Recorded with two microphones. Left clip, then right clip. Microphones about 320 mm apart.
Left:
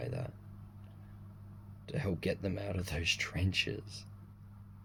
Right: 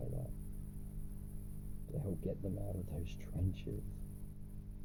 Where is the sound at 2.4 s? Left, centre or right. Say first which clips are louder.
Left 7 dB; left.